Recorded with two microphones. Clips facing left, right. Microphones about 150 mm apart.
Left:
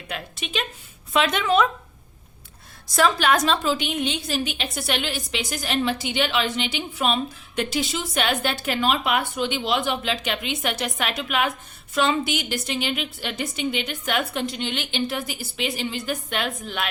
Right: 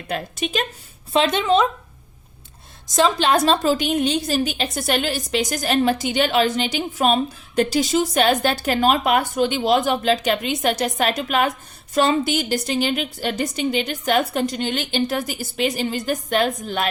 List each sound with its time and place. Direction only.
0.1 s speech: 40° right (ahead or behind)
1.1 s speech: 30° right (ahead or behind)
2.8 s a woman's voice: 20° right (ahead or behind); by 16.9 s 40° right (ahead or behind)